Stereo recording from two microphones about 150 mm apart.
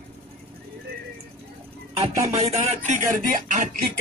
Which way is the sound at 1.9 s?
45° right (ahead or behind).